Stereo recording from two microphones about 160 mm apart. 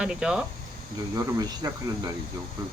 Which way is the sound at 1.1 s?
25° right (ahead or behind).